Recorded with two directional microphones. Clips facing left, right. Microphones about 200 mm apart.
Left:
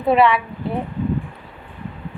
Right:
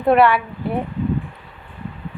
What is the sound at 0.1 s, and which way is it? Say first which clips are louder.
Speech: right 1 dB; centre (ahead or behind).